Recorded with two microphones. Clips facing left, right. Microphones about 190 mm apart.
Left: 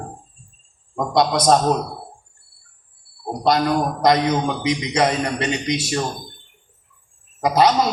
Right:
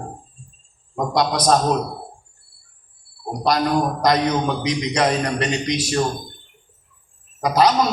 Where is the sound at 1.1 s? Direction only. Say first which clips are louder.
Left 2 dB; 25° left (ahead or behind).